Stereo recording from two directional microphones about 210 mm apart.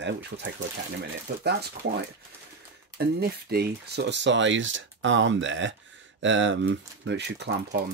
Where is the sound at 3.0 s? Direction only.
50° right (ahead or behind).